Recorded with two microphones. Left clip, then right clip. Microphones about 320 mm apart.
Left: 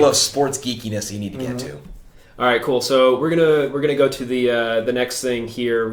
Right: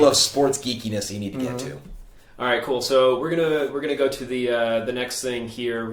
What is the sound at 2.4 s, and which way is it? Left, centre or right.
Speech, left.